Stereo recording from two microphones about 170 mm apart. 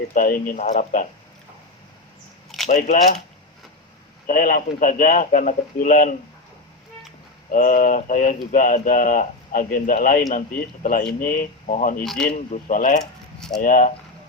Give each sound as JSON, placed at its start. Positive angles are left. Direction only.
{"t": 0.1, "sound": "speech", "side_deg": 55}
{"t": 2.6, "sound": "speech", "side_deg": 50}
{"t": 4.3, "sound": "speech", "side_deg": 55}
{"t": 7.5, "sound": "speech", "side_deg": 55}
{"t": 12.0, "sound": "speech", "side_deg": 5}
{"t": 12.3, "sound": "speech", "side_deg": 45}